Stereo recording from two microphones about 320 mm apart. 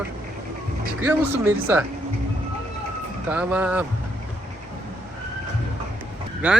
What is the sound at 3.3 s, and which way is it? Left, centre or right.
Speech, centre.